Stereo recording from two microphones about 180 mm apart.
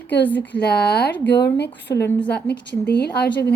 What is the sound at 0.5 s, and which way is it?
Speech, 65° left (ahead or behind).